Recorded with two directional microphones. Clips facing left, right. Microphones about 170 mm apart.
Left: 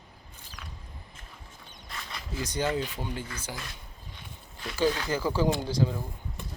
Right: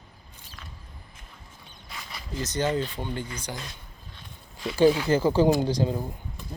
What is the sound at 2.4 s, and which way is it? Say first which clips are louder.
Speech: right 3 dB; 10° left (ahead or behind).